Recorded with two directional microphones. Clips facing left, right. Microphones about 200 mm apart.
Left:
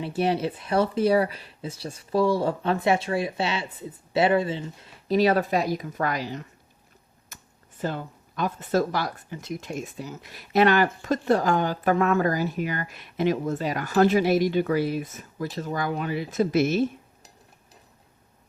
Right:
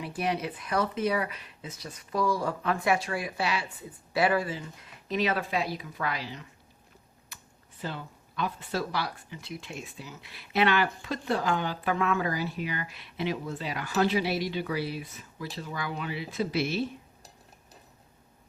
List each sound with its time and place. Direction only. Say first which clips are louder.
0.0 s speech: left 6 dB; 30° left (ahead or behind); by 6.4 s 45° left (ahead or behind)
7.3 s computer keyboard: left 3 dB; 45° left (ahead or behind)
7.8 s speech: left 7 dB; 45° left (ahead or behind)